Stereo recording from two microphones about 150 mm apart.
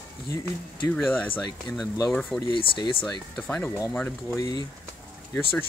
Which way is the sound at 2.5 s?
30° left (ahead or behind).